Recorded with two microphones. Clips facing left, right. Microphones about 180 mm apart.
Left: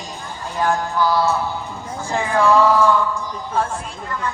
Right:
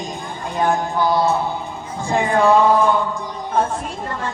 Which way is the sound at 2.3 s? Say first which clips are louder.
Right 1 dB; 60° right (ahead or behind).